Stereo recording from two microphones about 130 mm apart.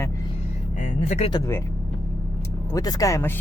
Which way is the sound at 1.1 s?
55° left (ahead or behind).